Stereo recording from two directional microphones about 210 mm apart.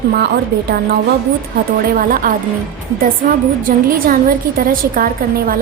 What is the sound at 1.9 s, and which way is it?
Speech, 40° right (ahead or behind).